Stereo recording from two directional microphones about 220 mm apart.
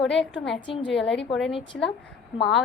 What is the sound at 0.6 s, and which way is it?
Speech, 20° left (ahead or behind).